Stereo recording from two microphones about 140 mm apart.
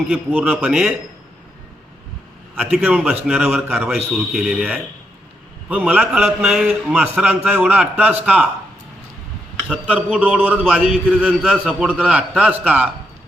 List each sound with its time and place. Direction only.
0.3 s a man's voice: 10° right (ahead or behind)
2.6 s a man's voice: 10° right (ahead or behind)
9.6 s a man's voice: 10° right (ahead or behind)